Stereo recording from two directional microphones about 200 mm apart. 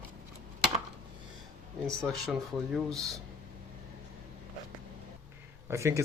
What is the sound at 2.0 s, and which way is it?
Speech, centre (ahead or behind).